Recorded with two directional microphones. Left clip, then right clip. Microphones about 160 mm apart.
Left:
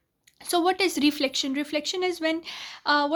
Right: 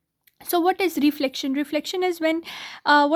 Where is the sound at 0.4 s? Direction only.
35° right (ahead or behind).